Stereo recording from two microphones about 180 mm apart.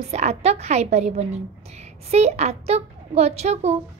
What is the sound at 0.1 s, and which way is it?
A woman's voice, 35° right (ahead or behind).